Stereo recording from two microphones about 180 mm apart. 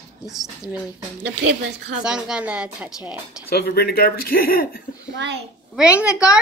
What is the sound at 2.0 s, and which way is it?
Speech, 5° right (ahead or behind).